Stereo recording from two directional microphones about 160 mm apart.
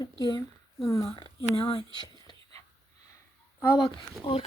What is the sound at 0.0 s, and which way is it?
Speech, 25° left (ahead or behind).